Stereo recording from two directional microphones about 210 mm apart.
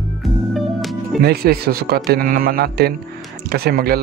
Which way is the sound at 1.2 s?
50° right (ahead or behind).